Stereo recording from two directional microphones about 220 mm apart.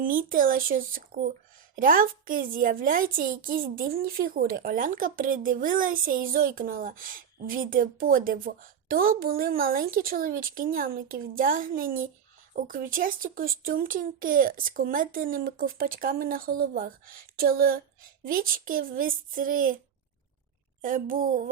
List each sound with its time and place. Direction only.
0.0 s speech: 40° right (ahead or behind)
20.8 s speech: 40° right (ahead or behind)